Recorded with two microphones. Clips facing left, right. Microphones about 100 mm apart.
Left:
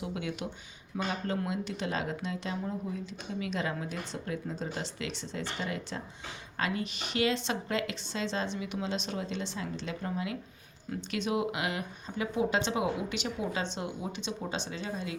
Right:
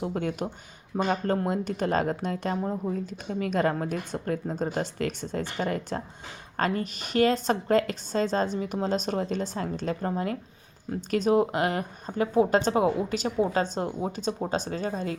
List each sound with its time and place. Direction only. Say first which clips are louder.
0.0 s speech: right 6 dB; 45° right (ahead or behind)